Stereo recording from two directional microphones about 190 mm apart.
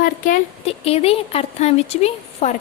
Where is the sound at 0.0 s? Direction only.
45° left (ahead or behind).